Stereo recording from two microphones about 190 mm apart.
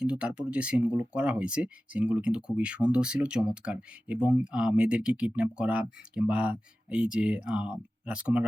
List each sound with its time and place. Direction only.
0.0 s speech: 5° right (ahead or behind)